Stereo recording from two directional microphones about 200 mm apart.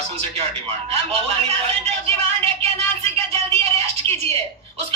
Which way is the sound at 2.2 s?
30° right (ahead or behind).